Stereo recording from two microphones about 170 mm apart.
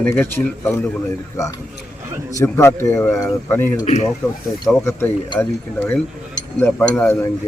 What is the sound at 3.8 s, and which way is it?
Speech, 40° left (ahead or behind).